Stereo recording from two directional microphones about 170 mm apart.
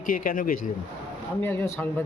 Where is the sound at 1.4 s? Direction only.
10° left (ahead or behind).